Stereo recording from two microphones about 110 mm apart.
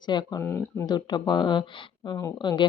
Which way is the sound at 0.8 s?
40° left (ahead or behind).